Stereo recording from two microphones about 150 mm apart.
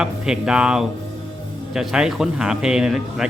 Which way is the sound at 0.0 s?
5° right (ahead or behind).